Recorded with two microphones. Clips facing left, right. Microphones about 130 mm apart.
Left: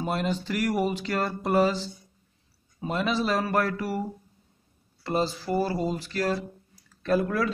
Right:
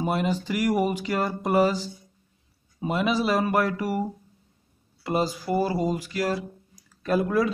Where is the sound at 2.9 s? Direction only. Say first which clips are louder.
Right 2 dB; 10° right (ahead or behind).